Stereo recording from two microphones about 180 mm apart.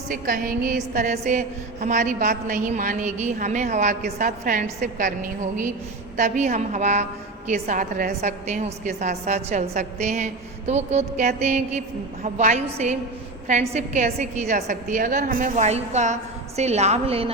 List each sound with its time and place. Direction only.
0.1 s a woman's voice: 55° right (ahead or behind)
1.1 s a woman's voice: 40° right (ahead or behind)